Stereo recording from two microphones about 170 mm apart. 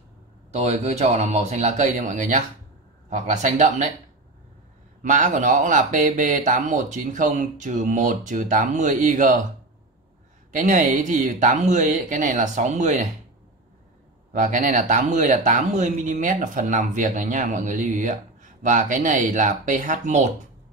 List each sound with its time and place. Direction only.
0.5 s a man's voice: 40° right (ahead or behind)
5.0 s speech: 45° right (ahead or behind)
10.5 s speech: 50° right (ahead or behind)
14.3 s speech: 45° right (ahead or behind)